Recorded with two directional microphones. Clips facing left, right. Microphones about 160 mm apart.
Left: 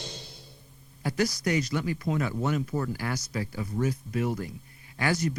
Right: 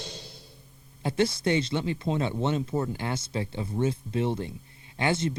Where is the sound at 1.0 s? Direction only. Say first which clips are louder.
Right 2 dB; 25° right (ahead or behind).